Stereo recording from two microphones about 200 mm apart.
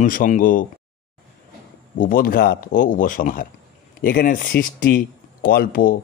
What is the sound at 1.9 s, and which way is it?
A man's voice, 45° left (ahead or behind).